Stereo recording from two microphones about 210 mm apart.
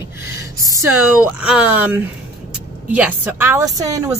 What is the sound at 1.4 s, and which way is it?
Speech, 5° right (ahead or behind).